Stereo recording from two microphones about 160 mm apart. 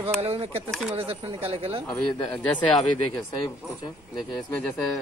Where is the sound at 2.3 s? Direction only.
5° left (ahead or behind).